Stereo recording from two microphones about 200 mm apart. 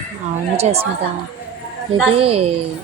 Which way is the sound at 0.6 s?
30° right (ahead or behind).